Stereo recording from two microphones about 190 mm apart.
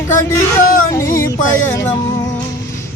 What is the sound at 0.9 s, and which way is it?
Music, 15° left (ahead or behind).